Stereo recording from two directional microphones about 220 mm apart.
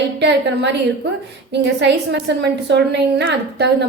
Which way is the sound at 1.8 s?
50° right (ahead or behind).